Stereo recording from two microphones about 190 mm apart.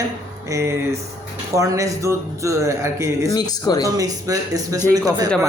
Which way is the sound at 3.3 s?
20° left (ahead or behind).